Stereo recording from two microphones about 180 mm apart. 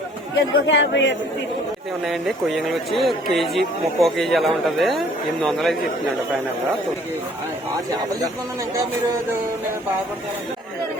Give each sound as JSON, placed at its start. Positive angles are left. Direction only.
{"t": 0.3, "sound": "speech", "side_deg": 90}
{"t": 2.0, "sound": "speech", "side_deg": 0}